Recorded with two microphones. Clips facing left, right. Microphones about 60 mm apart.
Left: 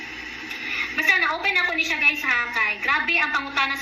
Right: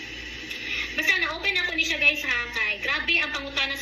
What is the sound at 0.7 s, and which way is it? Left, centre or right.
A woman's voice, left.